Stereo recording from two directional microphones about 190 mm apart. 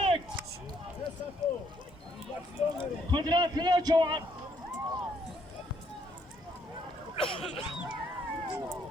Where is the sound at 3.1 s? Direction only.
25° right (ahead or behind).